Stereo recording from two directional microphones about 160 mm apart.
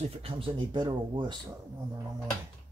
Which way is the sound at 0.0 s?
35° right (ahead or behind).